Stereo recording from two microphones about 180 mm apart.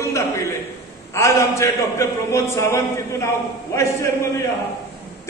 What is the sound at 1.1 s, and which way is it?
A man's voice, 15° left (ahead or behind).